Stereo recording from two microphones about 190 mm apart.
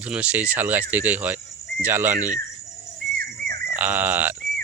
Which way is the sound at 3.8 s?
10° right (ahead or behind).